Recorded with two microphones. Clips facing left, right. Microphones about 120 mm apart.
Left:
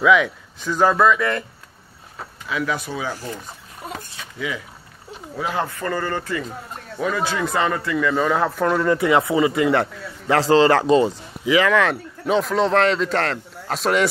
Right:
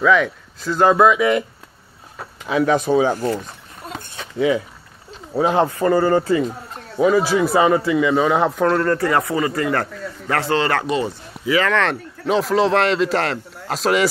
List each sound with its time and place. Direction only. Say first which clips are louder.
0.0 s a man's voice: even; 5° left (ahead or behind)
0.7 s speech: right 3 dB; 10° right (ahead or behind)
2.4 s speech: right 7 dB; 35° right (ahead or behind)
2.7 s speech: right 10 dB; 45° right (ahead or behind)
3.8 s a sound: even; 15° left (ahead or behind)
4.4 s speech: right 11 dB; 35° right (ahead or behind)
7.0 s speech: right 7 dB; 15° right (ahead or behind)
8.6 s speech: even; 5° left (ahead or behind)
8.9 s a man's voice: left 1 dB; 15° left (ahead or behind)
10.5 s speech: left 6 dB; 30° left (ahead or behind)
11.1 s speech: left 1 dB; 15° left (ahead or behind); by 14.0 s centre (ahead or behind)